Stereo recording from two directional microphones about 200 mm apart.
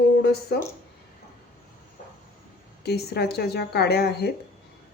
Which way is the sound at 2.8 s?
55° left (ahead or behind).